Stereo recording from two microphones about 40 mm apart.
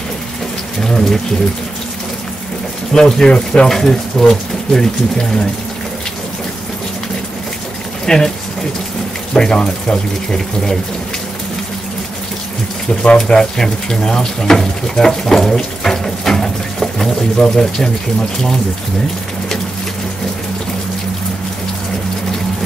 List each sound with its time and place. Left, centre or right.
0.7 s rain: centre
2.9 s speech: centre
8.0 s speech: centre
9.3 s speech: centre
13.0 s speech: left